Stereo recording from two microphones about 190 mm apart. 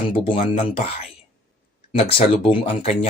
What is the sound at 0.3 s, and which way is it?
Speech, 30° left (ahead or behind).